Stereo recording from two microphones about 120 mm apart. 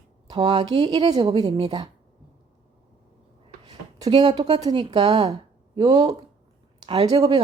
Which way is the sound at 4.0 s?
35° right (ahead or behind).